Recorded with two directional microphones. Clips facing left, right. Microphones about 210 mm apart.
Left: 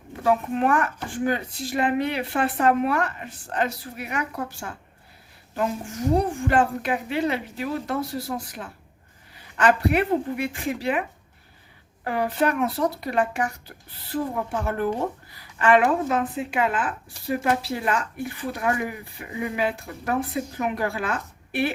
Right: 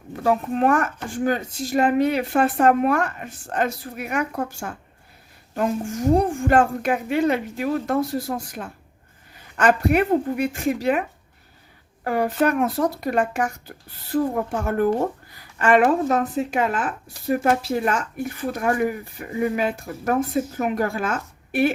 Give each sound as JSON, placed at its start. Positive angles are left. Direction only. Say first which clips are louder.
{"t": 0.3, "sound": "speech", "louder": "right 2 dB", "side_deg": -40}
{"t": 12.0, "sound": "speech", "louder": "right 3 dB", "side_deg": -45}